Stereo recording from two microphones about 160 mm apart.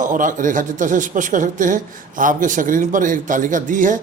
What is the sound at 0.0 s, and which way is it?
A man's voice, 55° right (ahead or behind).